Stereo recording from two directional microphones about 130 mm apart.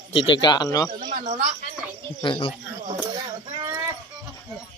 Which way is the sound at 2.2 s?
40° left (ahead or behind).